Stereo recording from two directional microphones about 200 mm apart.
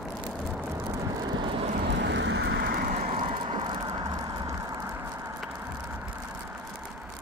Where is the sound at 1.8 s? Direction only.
60° right (ahead or behind).